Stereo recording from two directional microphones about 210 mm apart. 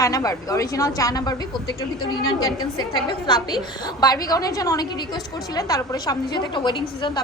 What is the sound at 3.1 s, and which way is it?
A woman's voice, 20° left (ahead or behind).